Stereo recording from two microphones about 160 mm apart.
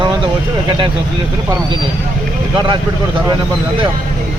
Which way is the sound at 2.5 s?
30° right (ahead or behind).